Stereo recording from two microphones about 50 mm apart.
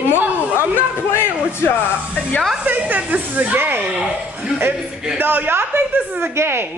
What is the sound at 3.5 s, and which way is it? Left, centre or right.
Speech, right.